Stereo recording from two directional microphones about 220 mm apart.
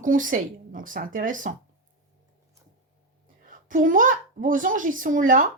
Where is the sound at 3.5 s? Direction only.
35° right (ahead or behind).